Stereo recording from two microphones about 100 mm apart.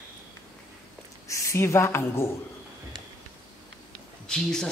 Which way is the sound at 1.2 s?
30° left (ahead or behind).